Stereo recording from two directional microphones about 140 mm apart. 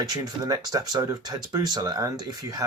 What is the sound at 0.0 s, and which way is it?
Speech, 25° right (ahead or behind).